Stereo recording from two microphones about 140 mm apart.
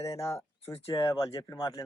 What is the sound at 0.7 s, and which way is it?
Speech, 40° left (ahead or behind).